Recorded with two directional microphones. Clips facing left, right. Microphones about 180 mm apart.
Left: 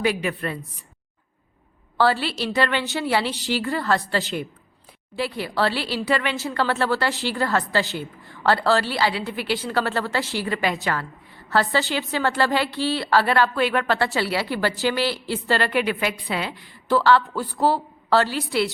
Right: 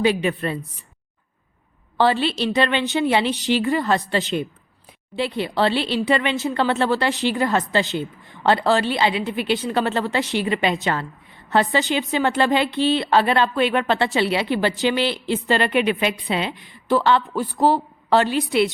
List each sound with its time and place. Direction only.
0.0 s a woman's voice: 25° right (ahead or behind)
2.0 s a woman's voice: 20° right (ahead or behind)